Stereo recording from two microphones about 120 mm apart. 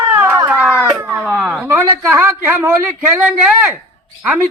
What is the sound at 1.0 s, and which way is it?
Chop, 15° right (ahead or behind).